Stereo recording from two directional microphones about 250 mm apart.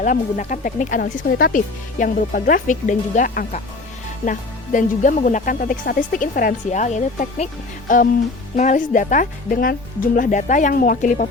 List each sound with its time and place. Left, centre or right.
0.0 s speech: left